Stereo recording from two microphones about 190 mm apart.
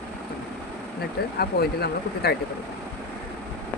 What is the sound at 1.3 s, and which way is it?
Speech, 55° left (ahead or behind).